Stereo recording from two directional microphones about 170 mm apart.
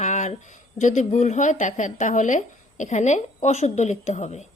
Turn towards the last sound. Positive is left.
turn(degrees=40)  # may be behind; listen again after turning